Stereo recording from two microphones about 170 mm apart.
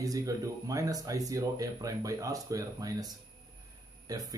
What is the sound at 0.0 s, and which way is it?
Speech, 20° right (ahead or behind).